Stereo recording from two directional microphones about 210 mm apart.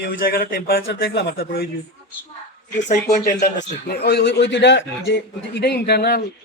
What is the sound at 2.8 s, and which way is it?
Speech, 35° left (ahead or behind).